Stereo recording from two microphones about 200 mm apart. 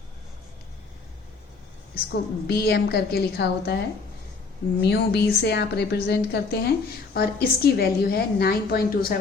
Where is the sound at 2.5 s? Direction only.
55° left (ahead or behind).